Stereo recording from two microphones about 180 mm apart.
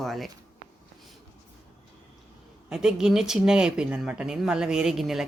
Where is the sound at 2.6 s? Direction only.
5° right (ahead or behind).